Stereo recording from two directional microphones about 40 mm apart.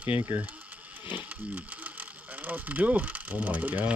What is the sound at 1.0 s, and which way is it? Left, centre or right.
Ratchet, right.